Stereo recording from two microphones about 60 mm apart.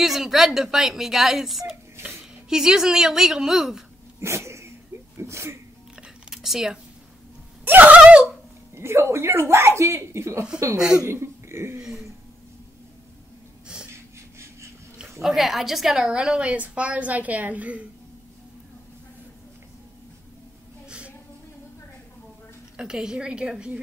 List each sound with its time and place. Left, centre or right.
0.0 s a woman's voice: centre
4.2 s sneeze: right
5.9 s a sound: centre
7.6 s a woman's voice: right
8.7 s speech: right
15.2 s a woman's voice: centre; by 17.8 s right
22.8 s a woman's voice: centre